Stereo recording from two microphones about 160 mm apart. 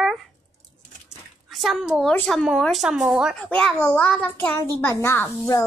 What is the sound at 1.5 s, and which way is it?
A child's voice, centre (ahead or behind).